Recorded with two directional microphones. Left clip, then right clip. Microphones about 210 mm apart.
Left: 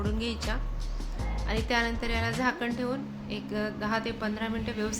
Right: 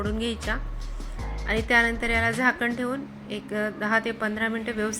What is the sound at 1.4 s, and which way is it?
A woman's voice, 15° right (ahead or behind).